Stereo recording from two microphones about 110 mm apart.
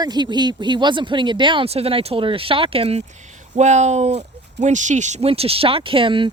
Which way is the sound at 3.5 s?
90° right.